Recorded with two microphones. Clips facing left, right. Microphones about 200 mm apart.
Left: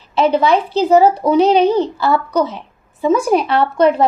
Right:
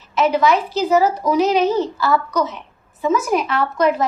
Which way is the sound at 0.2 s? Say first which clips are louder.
Left 3 dB; 30° left (ahead or behind).